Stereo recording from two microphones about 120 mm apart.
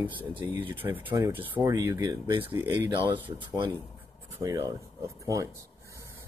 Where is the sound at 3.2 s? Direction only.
45° right (ahead or behind).